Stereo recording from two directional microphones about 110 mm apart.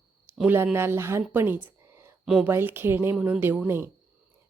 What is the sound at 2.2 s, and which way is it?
Speech, 5° right (ahead or behind).